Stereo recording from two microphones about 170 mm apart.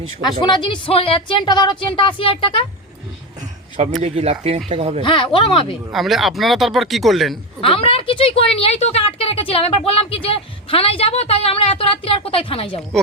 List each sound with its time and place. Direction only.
0.4 s a woman's voice: 30° left (ahead or behind)
4.0 s speech: 35° right (ahead or behind)
5.0 s a woman's voice: 30° left (ahead or behind)
5.9 s speech: centre (ahead or behind)
7.6 s a woman's voice: 30° left (ahead or behind)